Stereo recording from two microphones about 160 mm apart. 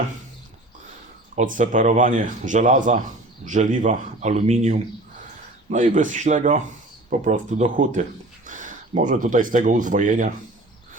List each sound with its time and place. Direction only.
1.4 s speech: 55° right (ahead or behind)